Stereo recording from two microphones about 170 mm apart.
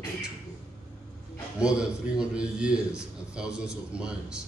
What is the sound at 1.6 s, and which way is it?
A man's voice, 5° right (ahead or behind).